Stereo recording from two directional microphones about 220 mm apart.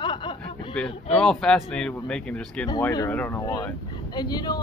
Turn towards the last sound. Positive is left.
turn(degrees=20)  # may be behind; listen again after turning